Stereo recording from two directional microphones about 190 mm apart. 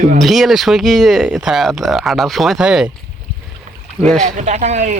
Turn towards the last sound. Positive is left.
turn(degrees=-35)  # may be behind; listen again after turning